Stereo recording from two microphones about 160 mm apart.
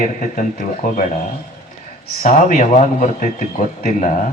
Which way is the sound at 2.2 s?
50° left (ahead or behind).